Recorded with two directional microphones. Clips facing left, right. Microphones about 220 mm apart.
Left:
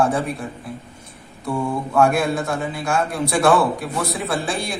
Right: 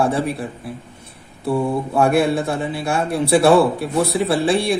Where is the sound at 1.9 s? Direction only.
30° right (ahead or behind).